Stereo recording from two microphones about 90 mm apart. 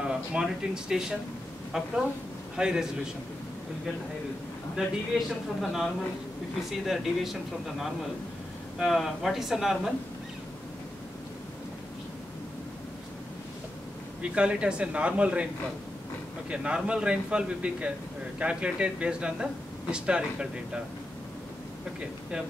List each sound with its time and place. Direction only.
0.1 s speech: 10° right (ahead or behind)
2.5 s speech: 5° right (ahead or behind)
4.7 s speech: centre (ahead or behind)
8.7 s speech: centre (ahead or behind)
14.2 s speech: 10° right (ahead or behind)
16.4 s speech: 10° right (ahead or behind)